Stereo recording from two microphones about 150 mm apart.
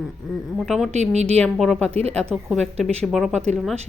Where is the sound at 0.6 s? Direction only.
Centre (ahead or behind).